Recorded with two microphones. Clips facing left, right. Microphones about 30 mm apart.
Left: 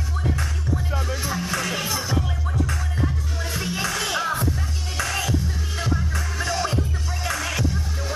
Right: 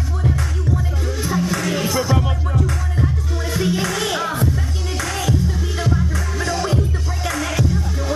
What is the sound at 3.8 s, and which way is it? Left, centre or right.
Music, centre.